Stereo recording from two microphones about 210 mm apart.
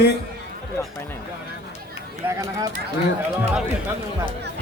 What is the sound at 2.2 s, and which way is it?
Speech, 15° right (ahead or behind).